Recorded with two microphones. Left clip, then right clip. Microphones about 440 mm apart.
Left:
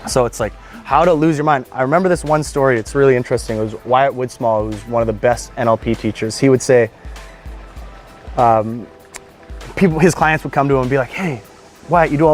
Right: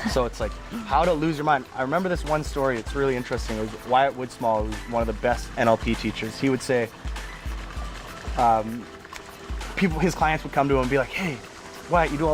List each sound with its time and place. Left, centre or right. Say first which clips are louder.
0.1 s speech: left 11 dB; left
8.4 s speech: left 8 dB; left
9.7 s speech: left 11 dB; left